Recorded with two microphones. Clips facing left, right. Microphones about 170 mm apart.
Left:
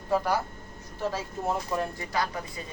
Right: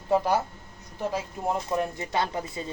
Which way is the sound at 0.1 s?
25° right (ahead or behind).